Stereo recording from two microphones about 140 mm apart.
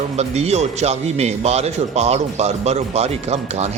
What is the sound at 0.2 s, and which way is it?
A man's voice, 50° right (ahead or behind).